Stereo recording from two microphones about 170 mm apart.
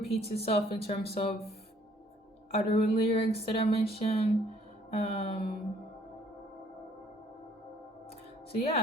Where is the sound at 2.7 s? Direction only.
35° left (ahead or behind).